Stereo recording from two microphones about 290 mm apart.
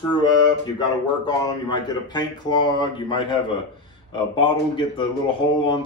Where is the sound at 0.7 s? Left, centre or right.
Centre.